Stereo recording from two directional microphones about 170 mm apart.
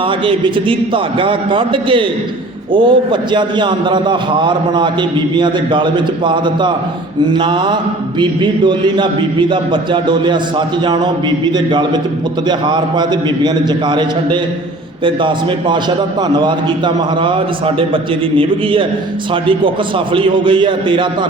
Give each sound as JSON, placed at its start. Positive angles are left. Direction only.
{"t": 0.3, "sound": "a man's voice", "side_deg": -30}